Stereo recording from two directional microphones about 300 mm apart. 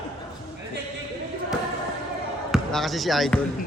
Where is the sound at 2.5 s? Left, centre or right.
Centre.